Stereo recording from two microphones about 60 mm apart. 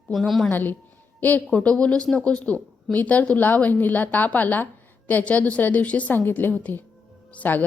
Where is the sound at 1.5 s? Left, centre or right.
Centre.